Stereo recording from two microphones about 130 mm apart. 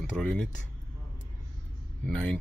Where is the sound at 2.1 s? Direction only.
10° left (ahead or behind).